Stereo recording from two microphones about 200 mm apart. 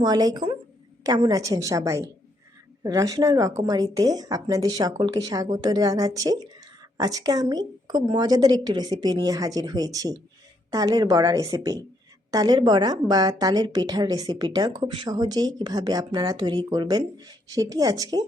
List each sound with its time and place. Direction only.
0.0 s a woman's voice: 20° right (ahead or behind)